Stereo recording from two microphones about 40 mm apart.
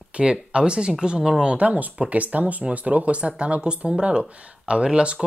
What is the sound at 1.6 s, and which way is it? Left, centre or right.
Speech, right.